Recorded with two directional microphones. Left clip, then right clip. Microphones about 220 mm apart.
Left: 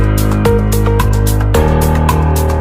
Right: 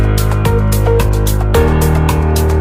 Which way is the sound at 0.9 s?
Centre (ahead or behind).